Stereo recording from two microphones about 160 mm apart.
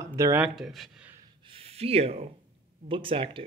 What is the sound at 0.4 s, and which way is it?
Speech, centre (ahead or behind).